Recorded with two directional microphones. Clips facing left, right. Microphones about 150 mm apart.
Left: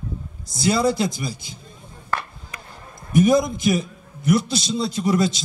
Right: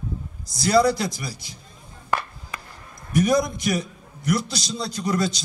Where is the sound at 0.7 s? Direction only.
25° left (ahead or behind).